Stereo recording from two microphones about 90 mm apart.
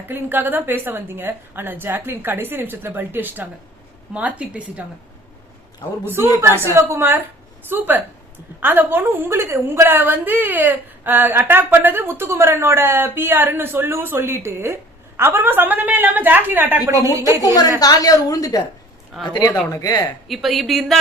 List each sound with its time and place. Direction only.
0.1 s a woman's voice: 25° right (ahead or behind)
6.1 s a woman's voice: 25° right (ahead or behind)
16.8 s a woman's voice: 35° right (ahead or behind)
17.4 s a woman's voice: 45° left (ahead or behind)
19.1 s a woman's voice: 5° right (ahead or behind)
19.7 s speech: 40° left (ahead or behind)
20.2 s a woman's voice: centre (ahead or behind)